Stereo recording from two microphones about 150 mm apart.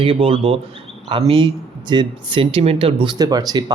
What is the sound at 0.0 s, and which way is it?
Speech, 35° right (ahead or behind).